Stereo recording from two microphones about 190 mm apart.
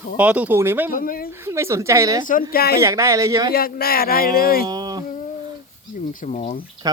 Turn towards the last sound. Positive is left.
turn(degrees=-20)  # may be behind; listen again after turning